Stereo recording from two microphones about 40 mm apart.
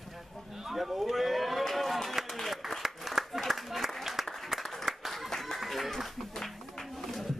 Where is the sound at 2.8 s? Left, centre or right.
Centre.